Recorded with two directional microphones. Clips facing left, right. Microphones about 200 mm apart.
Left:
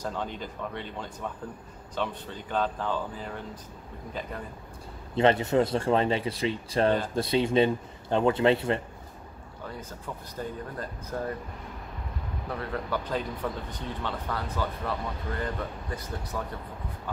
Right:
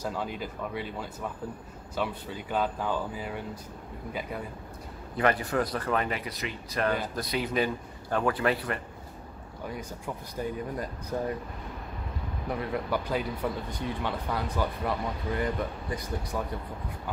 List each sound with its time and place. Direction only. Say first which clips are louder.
0.0 s speech: right 1 dB; 10° right (ahead or behind)
5.1 s speech: left 4 dB; 25° left (ahead or behind)
9.7 s speech: right 2 dB; 15° right (ahead or behind)
12.4 s speech: right 2 dB; 15° right (ahead or behind)